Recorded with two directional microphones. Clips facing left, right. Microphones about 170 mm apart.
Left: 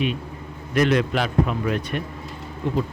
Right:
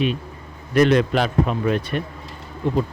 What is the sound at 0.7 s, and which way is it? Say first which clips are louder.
A man's voice: right 4 dB; 35° right (ahead or behind).